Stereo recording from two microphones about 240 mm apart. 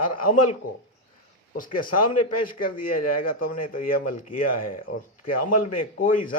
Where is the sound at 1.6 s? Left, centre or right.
Left.